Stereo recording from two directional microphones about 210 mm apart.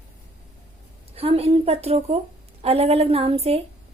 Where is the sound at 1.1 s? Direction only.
30° right (ahead or behind).